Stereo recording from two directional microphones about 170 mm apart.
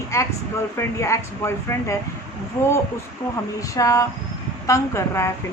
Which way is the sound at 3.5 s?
20° left (ahead or behind).